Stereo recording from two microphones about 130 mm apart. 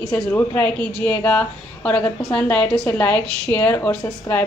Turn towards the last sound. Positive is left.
turn(degrees=20)  # may be behind; listen again after turning